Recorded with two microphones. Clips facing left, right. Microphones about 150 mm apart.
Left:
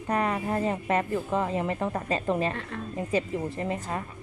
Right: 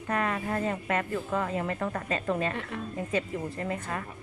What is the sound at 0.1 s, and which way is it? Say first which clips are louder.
Speech: left 3 dB; 30° left (ahead or behind).